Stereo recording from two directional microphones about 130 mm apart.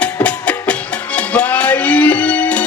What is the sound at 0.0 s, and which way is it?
Music, 10° left (ahead or behind).